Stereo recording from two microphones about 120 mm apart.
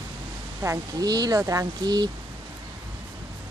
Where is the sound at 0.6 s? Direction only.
30° right (ahead or behind).